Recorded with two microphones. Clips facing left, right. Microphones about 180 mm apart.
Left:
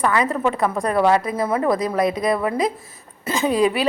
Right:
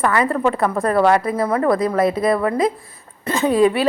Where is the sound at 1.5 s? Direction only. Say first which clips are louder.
Right 2 dB; 20° left (ahead or behind).